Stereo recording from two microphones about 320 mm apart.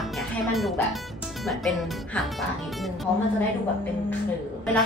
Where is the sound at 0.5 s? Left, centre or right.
Centre.